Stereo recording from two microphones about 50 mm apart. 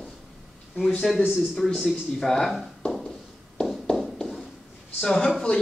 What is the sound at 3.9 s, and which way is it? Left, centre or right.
Tap, centre.